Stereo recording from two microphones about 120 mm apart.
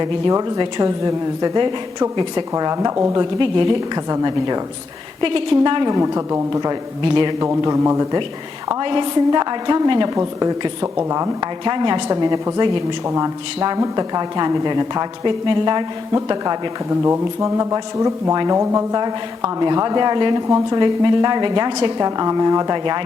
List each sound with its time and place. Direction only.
0.0 s a woman's voice: 30° right (ahead or behind)
1.5 s a woman's voice: 40° right (ahead or behind); by 3.2 s 25° right (ahead or behind)
3.2 s a woman's voice: 40° right (ahead or behind)
5.2 s a woman's voice: 45° right (ahead or behind)
6.0 s speech: 25° right (ahead or behind)
7.0 s a woman's voice: 40° right (ahead or behind)
7.3 s speech: 25° right (ahead or behind)
8.8 s a woman's voice: 40° right (ahead or behind); by 11.3 s 25° right (ahead or behind)
11.3 s a woman's voice: 40° right (ahead or behind)
12.1 s a woman's voice: 25° right (ahead or behind)
16.9 s a woman's voice: 25° right (ahead or behind)